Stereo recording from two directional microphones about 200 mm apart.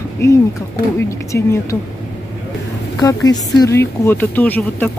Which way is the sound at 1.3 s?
15° left (ahead or behind).